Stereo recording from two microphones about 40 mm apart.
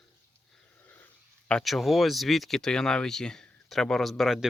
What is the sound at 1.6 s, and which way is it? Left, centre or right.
Speech, centre.